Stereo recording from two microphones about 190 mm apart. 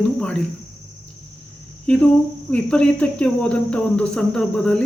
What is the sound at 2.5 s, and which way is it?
Speech, 5° left (ahead or behind).